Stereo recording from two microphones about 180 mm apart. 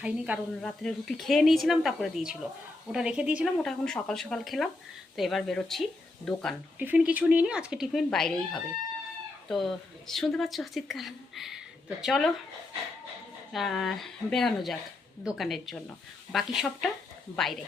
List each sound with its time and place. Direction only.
0.0 s a woman's voice: centre (ahead or behind)
6.7 s a woman's voice: 10° right (ahead or behind)
13.5 s a woman's voice: centre (ahead or behind)